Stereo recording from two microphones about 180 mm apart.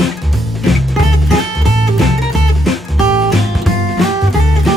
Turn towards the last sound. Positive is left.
turn(degrees=0)  # may be behind; listen again after turning